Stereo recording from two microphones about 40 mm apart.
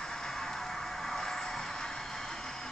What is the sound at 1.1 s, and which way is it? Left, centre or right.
Vehicle, centre.